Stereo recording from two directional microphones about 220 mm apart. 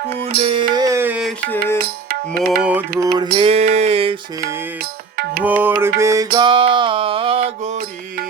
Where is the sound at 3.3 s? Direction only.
25° right (ahead or behind).